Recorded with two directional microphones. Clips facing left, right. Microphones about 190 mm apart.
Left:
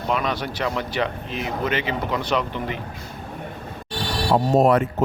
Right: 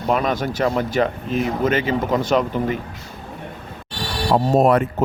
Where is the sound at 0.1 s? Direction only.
45° right (ahead or behind).